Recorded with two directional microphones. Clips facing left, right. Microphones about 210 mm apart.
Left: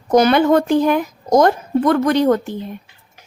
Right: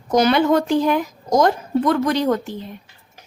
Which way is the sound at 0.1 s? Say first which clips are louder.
Left 3 dB; 50° left (ahead or behind).